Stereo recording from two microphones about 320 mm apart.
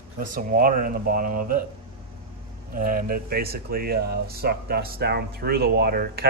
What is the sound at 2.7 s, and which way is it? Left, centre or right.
Speech, right.